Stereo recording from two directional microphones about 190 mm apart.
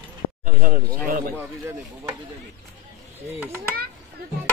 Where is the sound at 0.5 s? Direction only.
45° right (ahead or behind).